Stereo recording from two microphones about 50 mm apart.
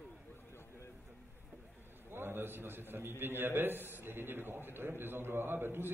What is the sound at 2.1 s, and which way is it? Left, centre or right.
A man's voice, right.